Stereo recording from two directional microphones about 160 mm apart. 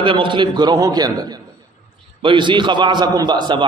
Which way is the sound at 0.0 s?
30° right (ahead or behind).